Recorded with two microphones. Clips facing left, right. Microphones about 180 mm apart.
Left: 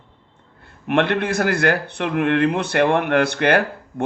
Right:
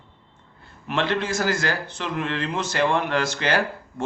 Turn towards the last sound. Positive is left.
turn(degrees=60)  # may be behind; listen again after turning